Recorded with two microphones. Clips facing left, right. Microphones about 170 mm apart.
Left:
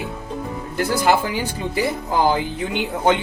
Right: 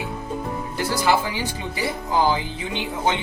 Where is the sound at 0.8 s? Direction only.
50° left (ahead or behind).